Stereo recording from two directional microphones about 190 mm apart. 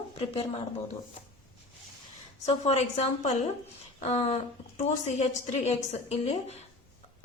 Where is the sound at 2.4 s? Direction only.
35° left (ahead or behind).